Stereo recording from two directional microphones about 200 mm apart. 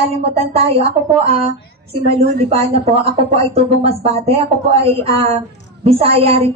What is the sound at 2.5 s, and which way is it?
A woman's voice, 30° right (ahead or behind).